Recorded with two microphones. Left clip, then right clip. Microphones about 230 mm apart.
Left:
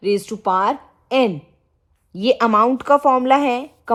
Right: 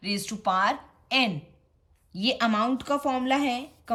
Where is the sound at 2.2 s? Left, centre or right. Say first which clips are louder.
Left 10 dB; left.